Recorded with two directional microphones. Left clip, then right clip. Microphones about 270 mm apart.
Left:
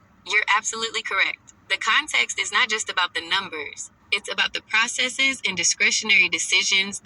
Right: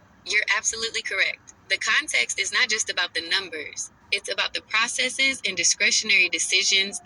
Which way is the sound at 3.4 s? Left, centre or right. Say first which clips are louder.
Left 1 dB; left.